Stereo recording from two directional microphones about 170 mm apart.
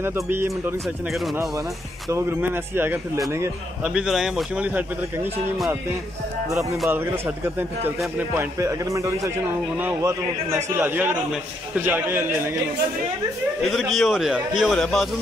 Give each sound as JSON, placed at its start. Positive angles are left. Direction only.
{"t": 0.0, "sound": "a man's voice", "side_deg": -15}
{"t": 0.8, "sound": "a man's voice", "side_deg": 0}
{"t": 2.0, "sound": "a man's voice", "side_deg": -15}
{"t": 3.9, "sound": "a man's voice", "side_deg": -5}
{"t": 6.5, "sound": "a man's voice", "side_deg": -15}
{"t": 8.5, "sound": "a man's voice", "side_deg": -20}
{"t": 13.6, "sound": "a man's voice", "side_deg": 0}